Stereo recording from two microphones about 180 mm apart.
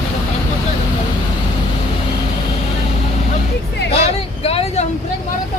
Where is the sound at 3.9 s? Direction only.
35° left (ahead or behind).